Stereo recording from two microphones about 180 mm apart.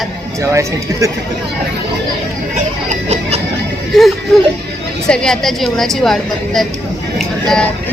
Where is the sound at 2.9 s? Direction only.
35° right (ahead or behind).